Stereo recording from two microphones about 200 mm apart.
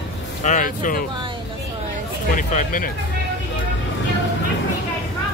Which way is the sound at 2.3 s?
45° left (ahead or behind).